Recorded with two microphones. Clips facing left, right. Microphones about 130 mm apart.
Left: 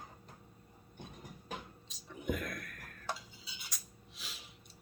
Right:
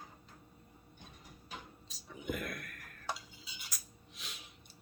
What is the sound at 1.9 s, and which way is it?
Dishes, centre (ahead or behind).